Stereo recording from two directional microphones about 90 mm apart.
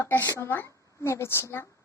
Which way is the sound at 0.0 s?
25° left (ahead or behind).